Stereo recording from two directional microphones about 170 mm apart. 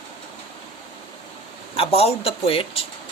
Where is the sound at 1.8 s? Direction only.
35° left (ahead or behind).